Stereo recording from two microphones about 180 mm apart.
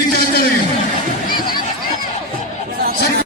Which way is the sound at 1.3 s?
25° left (ahead or behind).